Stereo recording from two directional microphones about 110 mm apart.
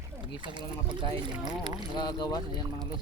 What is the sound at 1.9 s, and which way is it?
Speech, 40° left (ahead or behind).